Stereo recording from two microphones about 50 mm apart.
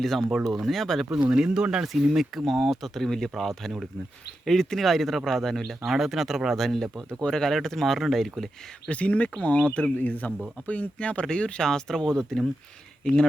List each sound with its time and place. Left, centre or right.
0.0 s speech: centre
1.3 s speech: centre
1.8 s speech: centre
5.9 s speech: centre
8.9 s speech: left